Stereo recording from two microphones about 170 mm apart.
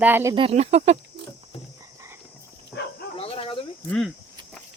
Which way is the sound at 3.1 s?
35° left (ahead or behind).